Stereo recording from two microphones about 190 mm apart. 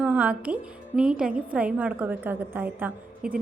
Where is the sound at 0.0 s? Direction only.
5° right (ahead or behind).